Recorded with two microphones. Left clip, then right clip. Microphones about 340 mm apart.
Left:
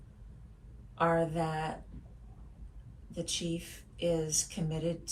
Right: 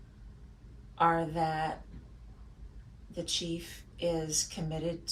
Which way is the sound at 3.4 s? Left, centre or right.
Centre.